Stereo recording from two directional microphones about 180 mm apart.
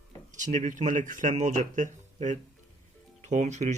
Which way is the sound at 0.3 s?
45° right (ahead or behind).